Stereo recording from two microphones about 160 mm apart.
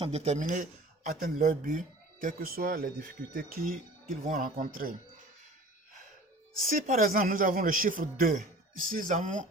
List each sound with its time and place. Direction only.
0.0 s a man's voice: 40° right (ahead or behind); by 4.9 s 60° right (ahead or behind)
6.7 s a man's voice: 55° right (ahead or behind)